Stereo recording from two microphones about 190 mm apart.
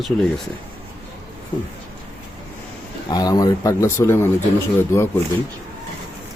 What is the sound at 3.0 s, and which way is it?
Speech, 20° left (ahead or behind).